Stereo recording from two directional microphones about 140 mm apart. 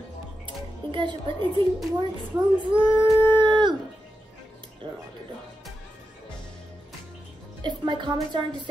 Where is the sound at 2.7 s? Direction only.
35° right (ahead or behind).